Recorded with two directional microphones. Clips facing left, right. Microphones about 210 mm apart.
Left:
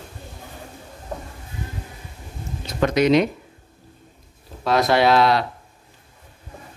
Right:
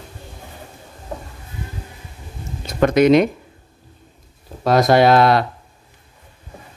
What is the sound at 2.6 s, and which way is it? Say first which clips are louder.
Speech: right 5 dB; 50° right (ahead or behind).